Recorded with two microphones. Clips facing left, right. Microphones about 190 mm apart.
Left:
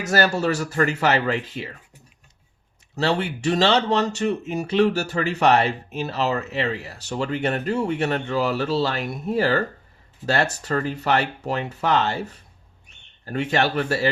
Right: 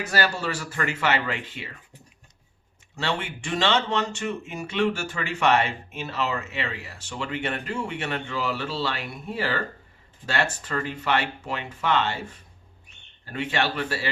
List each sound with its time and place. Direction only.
0.0 s speech: 45° left (ahead or behind)
2.9 s speech: 35° left (ahead or behind)